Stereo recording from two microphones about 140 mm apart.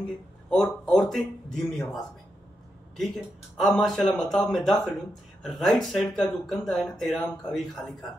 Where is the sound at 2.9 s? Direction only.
Centre (ahead or behind).